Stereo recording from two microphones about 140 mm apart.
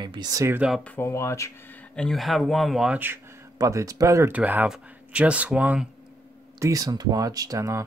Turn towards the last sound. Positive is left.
turn(degrees=-20)  # may be behind; listen again after turning